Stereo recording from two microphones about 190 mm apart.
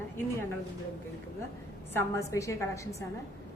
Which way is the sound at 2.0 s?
15° left (ahead or behind).